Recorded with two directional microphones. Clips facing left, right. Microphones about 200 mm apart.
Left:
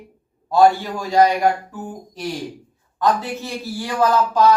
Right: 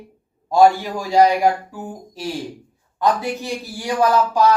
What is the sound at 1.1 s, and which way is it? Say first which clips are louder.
A man's voice: right 1 dB; 10° right (ahead or behind).